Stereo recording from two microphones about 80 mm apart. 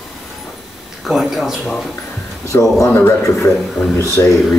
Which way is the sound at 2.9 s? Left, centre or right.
Left.